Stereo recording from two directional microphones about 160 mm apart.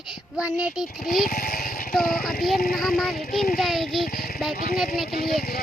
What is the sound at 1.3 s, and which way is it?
Speech, 60° left (ahead or behind).